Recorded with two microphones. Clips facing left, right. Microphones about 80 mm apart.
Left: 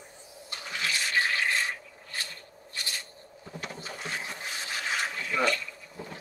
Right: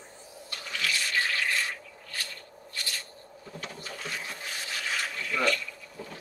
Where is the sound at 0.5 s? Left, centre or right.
Left.